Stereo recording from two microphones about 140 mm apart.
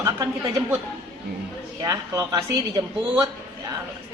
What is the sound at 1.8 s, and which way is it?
A woman's voice, 25° right (ahead or behind).